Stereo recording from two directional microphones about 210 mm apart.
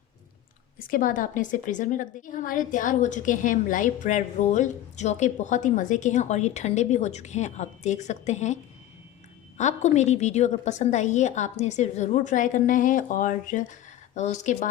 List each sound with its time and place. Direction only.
0.8 s a woman's voice: 40° left (ahead or behind)
9.6 s a woman's voice: 35° left (ahead or behind)